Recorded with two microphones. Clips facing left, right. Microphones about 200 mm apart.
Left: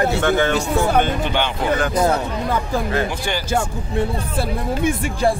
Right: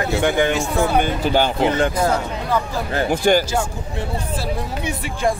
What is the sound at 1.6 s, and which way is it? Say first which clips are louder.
Speech: right 2 dB; 25° right (ahead or behind).